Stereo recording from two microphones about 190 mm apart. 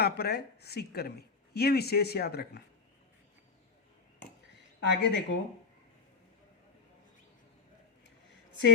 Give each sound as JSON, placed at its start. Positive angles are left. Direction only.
{"t": 0.0, "sound": "speech", "side_deg": 55}
{"t": 4.8, "sound": "a woman's voice", "side_deg": 65}